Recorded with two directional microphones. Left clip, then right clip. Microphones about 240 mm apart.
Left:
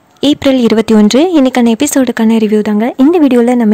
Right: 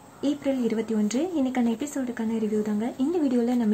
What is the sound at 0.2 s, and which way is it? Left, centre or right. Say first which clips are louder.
Speech: left 17 dB; left.